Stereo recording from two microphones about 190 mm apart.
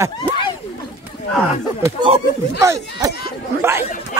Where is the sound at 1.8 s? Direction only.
25° right (ahead or behind).